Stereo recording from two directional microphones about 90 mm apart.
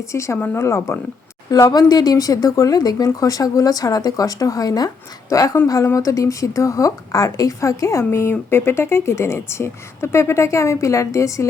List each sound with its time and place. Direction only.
0.1 s speech: 35° left (ahead or behind)
1.5 s speech: 40° left (ahead or behind)